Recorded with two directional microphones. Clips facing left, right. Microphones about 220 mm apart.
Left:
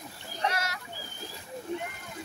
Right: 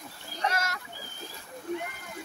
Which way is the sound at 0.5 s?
45° right (ahead or behind).